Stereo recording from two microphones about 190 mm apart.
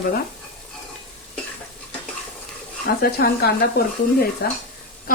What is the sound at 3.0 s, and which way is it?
A woman's voice, 55° left (ahead or behind).